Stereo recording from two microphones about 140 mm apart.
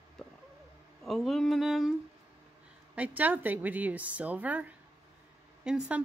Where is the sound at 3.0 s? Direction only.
10° right (ahead or behind).